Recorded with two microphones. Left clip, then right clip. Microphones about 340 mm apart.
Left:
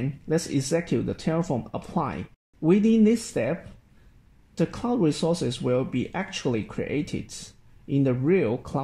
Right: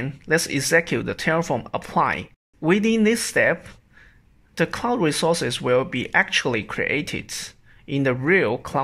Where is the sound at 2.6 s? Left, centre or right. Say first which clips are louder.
Right 2 dB; right.